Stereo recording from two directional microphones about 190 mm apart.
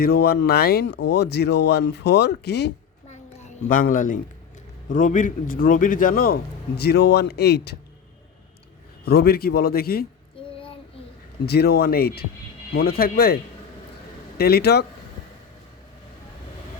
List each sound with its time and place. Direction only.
0.0 s speech: 55° left (ahead or behind)
3.7 s a man's voice: 45° left (ahead or behind)
9.0 s a man's voice: 55° left (ahead or behind)
11.4 s speech: 60° left (ahead or behind)